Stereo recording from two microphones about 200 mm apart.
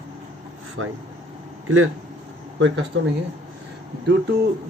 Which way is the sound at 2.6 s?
70° right (ahead or behind).